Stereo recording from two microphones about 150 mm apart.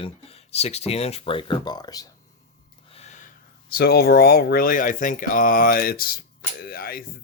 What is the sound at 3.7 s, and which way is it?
Speech, 90° left.